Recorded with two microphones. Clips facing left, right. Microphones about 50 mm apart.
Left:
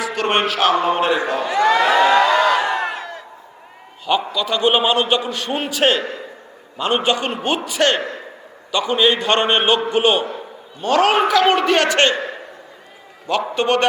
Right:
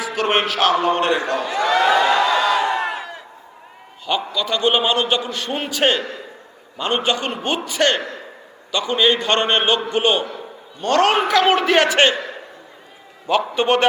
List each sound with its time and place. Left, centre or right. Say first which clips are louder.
0.0 s a man's voice: left 1 dB; centre
1.5 s speech: left 2 dB; left
2.7 s crowd: even; right
4.0 s a man's voice: left 3 dB; centre
6.0 s a man's voice: left 2 dB; left
6.7 s a man's voice: left 2 dB; centre
12.1 s a sound: left 2 dB; left
13.5 s a man's voice: left 2 dB; centre